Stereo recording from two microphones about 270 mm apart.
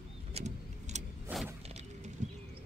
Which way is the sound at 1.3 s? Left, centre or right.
Centre.